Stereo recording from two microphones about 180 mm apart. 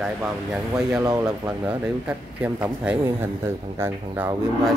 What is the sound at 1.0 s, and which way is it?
Speech, 15° right (ahead or behind).